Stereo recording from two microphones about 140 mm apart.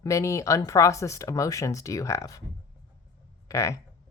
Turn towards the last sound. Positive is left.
turn(degrees=20)  # may be behind; listen again after turning